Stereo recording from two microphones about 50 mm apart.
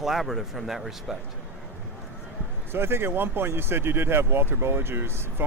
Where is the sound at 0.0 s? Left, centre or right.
Centre.